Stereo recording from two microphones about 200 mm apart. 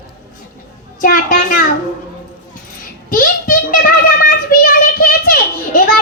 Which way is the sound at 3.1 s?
45° left (ahead or behind).